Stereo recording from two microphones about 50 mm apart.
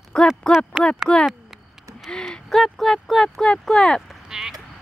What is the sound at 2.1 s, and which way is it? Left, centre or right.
Speech, centre.